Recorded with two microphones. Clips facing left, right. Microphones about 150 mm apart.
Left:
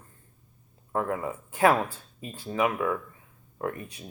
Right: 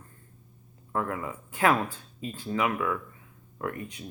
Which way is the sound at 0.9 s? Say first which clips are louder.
Left 2 dB; 25° left (ahead or behind).